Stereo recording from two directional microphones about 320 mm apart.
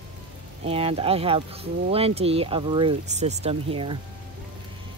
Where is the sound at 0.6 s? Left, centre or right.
Centre.